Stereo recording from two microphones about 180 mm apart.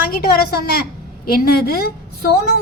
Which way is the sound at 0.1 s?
60° left (ahead or behind).